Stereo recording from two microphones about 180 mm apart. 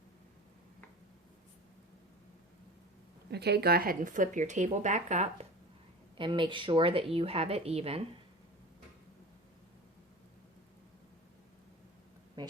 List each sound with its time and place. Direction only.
3.3 s speech: 65° right (ahead or behind); by 5.5 s 40° right (ahead or behind)
6.1 s a woman's voice: 30° right (ahead or behind)